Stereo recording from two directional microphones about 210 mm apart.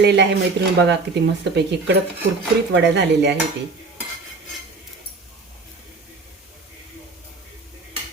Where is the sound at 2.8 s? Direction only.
55° right (ahead or behind).